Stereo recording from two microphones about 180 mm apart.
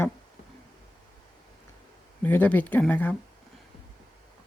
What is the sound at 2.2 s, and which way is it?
Speech, 10° left (ahead or behind).